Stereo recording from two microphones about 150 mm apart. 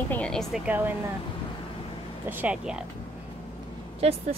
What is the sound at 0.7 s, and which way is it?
Speech, 10° right (ahead or behind).